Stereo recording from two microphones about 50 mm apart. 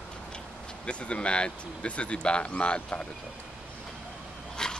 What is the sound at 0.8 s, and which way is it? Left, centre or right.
Speech, left.